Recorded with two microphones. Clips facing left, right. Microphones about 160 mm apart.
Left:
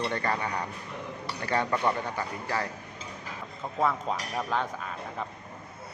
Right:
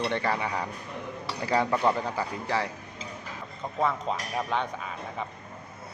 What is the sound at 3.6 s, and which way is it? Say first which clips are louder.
Speech: even; centre (ahead or behind).